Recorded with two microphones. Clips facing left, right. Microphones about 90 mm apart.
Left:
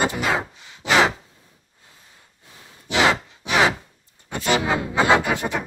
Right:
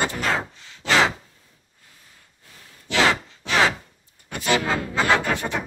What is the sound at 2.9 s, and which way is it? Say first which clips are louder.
Sigh: left 1 dB; 15° left (ahead or behind).